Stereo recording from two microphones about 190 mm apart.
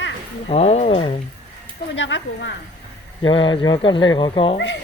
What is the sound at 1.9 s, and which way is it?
Speech, 70° left (ahead or behind).